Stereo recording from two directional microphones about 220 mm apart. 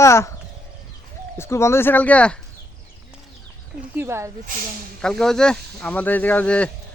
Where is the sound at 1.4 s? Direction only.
10° left (ahead or behind).